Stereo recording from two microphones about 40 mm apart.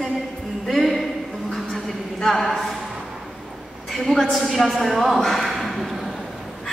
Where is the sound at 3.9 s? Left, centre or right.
Centre.